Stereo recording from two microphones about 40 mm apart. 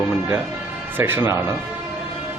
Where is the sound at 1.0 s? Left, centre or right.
Right.